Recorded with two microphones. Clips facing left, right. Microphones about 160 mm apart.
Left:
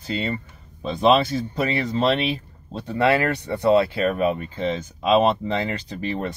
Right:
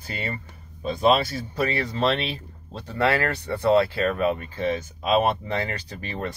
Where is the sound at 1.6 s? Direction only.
20° left (ahead or behind).